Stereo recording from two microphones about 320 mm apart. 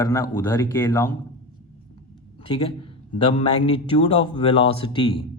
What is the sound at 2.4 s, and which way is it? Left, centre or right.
Speech, centre.